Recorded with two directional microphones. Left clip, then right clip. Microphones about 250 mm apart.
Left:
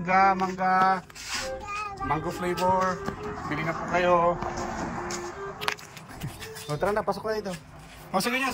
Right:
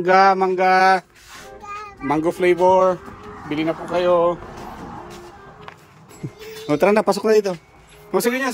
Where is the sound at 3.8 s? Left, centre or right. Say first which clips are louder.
Right 4 dB; right.